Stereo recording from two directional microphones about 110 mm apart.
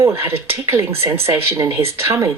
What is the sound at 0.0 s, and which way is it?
Speech, 20° right (ahead or behind).